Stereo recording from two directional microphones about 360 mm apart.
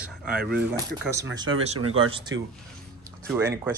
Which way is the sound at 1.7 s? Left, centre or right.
Right.